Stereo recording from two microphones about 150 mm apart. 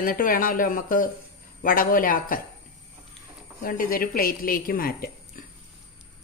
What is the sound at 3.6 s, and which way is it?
A woman's voice, 70° left (ahead or behind).